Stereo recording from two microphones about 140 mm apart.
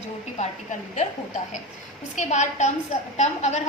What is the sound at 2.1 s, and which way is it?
A woman's voice, 55° left (ahead or behind).